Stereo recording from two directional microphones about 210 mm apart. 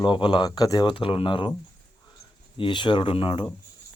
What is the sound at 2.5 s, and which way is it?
Speech, 25° left (ahead or behind).